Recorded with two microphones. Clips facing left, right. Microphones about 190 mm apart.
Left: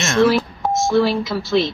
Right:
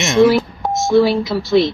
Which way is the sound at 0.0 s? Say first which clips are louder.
Right 4 dB; 15° right (ahead or behind).